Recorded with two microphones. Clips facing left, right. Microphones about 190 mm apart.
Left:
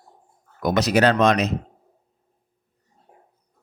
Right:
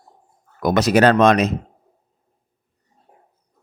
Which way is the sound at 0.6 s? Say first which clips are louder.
Right 4 dB; 50° right (ahead or behind).